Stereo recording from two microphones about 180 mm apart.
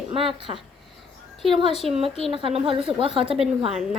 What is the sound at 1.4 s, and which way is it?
Speech, centre (ahead or behind).